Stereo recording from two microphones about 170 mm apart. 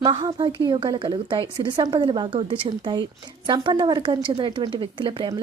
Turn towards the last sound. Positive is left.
turn(degrees=-30)  # may be behind; listen again after turning